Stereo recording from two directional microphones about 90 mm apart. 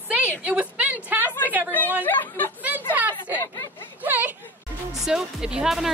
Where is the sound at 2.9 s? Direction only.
20° right (ahead or behind).